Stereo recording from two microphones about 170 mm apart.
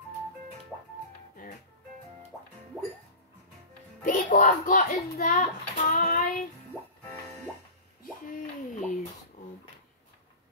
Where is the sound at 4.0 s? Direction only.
50° left (ahead or behind).